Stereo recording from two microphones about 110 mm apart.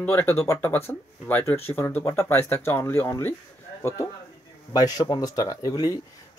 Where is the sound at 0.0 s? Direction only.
20° left (ahead or behind).